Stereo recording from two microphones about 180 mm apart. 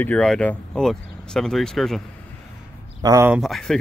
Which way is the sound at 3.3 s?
Centre (ahead or behind).